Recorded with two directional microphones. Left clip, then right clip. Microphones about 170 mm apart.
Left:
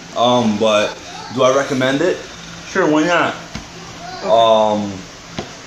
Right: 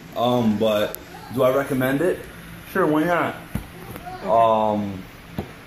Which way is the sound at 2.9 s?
25° left (ahead or behind).